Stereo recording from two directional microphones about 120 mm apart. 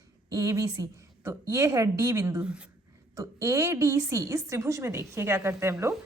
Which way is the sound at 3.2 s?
25° right (ahead or behind).